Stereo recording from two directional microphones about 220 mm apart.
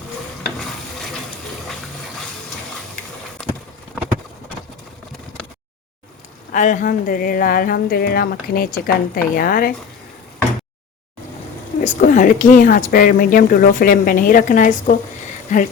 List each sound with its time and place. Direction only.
3.4 s clip-clop: 5° left (ahead or behind)
6.5 s speech: 35° left (ahead or behind)
11.8 s speech: 35° left (ahead or behind)